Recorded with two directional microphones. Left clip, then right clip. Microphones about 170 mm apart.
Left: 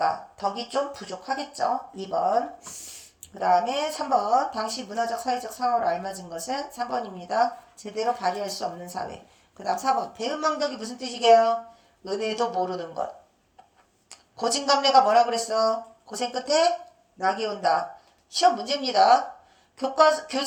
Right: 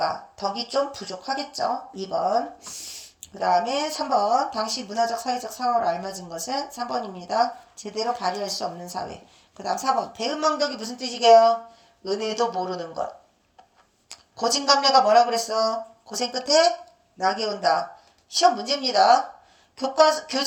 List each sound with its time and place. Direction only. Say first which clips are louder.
0.0 s speech: left 1 dB; 15° right (ahead or behind)
10.2 s speech: right 3 dB; 20° right (ahead or behind)
14.3 s speech: right 2 dB; 20° right (ahead or behind)